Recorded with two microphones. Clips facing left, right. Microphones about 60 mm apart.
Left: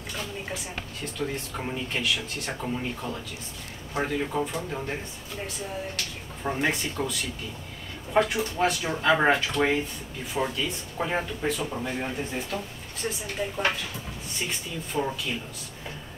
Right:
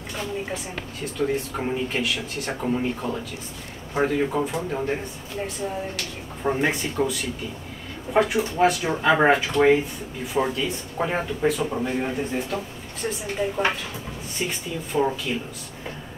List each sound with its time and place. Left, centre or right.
1.1 s speech: centre
2.6 s speech: centre
5.9 s speech: centre